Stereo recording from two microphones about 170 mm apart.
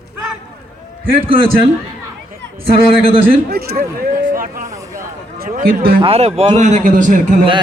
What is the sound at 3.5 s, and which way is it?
Speech, 65° right (ahead or behind).